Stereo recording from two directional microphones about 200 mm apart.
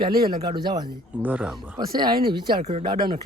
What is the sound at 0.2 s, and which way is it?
Speech, 20° right (ahead or behind).